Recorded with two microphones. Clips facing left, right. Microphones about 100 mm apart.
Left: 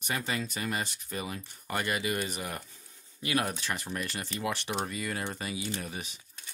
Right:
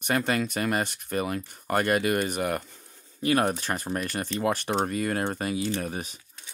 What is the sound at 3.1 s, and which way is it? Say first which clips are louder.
Speech: right 7 dB; 40° right (ahead or behind).